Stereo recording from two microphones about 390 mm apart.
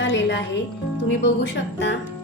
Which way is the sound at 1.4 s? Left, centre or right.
Left.